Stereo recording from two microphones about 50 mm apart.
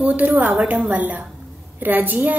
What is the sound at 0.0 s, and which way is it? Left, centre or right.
A woman's voice, right.